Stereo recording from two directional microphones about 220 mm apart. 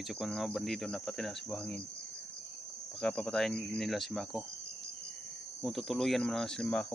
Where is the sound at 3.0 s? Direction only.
5° left (ahead or behind).